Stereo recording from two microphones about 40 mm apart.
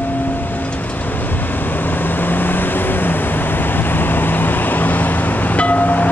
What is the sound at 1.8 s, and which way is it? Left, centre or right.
Vehicle, left.